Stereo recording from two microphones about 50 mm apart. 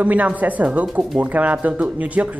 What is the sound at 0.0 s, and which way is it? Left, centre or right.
Speech, right.